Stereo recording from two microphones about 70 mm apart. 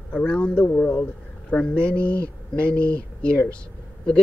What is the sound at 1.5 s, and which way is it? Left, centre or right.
Speech, centre.